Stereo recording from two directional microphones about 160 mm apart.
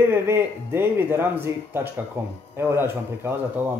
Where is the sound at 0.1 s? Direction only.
15° right (ahead or behind).